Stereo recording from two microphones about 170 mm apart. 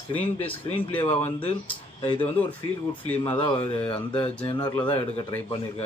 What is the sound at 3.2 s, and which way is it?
Speech, 30° left (ahead or behind).